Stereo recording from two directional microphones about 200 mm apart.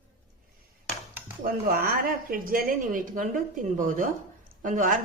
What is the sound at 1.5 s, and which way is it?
A woman's voice, 45° right (ahead or behind).